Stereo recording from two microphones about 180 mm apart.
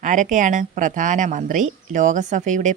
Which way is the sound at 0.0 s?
45° right (ahead or behind).